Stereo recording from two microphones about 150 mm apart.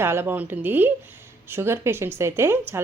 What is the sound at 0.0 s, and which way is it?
Speech, 15° right (ahead or behind).